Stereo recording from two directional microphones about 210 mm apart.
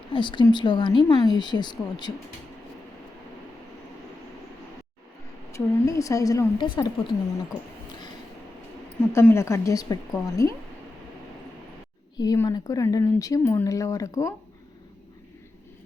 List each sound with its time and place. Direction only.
0.1 s speech: 25° left (ahead or behind)
5.5 s speech: 15° left (ahead or behind)
9.1 s speech: 10° left (ahead or behind)
12.1 s speech: 15° left (ahead or behind)